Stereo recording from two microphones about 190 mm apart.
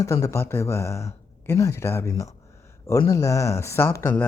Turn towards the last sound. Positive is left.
turn(degrees=15)  # may be behind; listen again after turning